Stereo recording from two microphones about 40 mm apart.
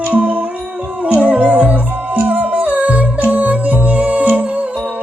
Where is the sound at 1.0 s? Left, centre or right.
Right.